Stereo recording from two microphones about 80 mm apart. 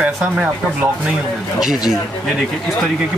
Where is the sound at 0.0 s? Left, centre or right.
Centre.